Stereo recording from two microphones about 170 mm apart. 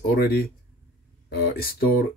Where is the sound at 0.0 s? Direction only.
65° left (ahead or behind).